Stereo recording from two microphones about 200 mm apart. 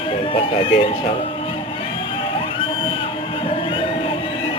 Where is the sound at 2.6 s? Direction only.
25° left (ahead or behind).